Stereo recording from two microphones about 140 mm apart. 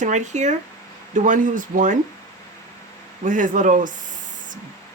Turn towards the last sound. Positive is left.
turn(degrees=-65)  # may be behind; listen again after turning